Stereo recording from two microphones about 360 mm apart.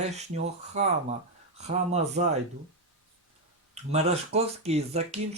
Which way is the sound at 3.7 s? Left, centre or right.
Centre.